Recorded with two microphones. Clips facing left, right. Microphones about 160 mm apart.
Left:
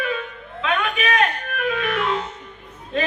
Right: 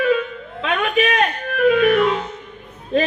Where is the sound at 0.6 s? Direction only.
35° right (ahead or behind).